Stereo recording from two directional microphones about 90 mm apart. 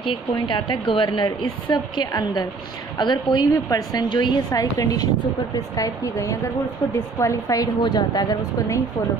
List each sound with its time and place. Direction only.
0.0 s speech: 65° left (ahead or behind)
1.2 s a woman's voice: 50° left (ahead or behind)
4.5 s a woman's voice: 40° left (ahead or behind)